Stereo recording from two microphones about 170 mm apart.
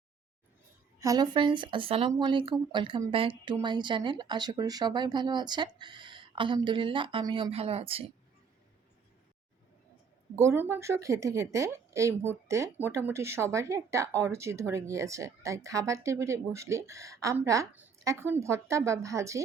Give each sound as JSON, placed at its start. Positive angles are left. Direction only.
{"t": 0.9, "sound": "speech", "side_deg": -20}
{"t": 10.3, "sound": "a woman's voice", "side_deg": -15}